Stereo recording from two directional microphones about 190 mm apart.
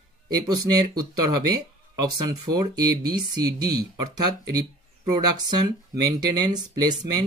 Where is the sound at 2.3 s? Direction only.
20° right (ahead or behind).